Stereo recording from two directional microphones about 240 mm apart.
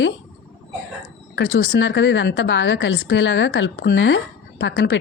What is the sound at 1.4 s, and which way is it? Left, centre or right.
A woman's voice, left.